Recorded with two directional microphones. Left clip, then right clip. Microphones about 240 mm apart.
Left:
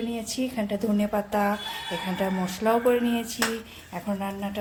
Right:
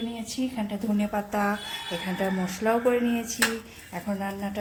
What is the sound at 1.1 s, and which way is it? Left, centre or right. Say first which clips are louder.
A woman's voice: left 1 dB; centre.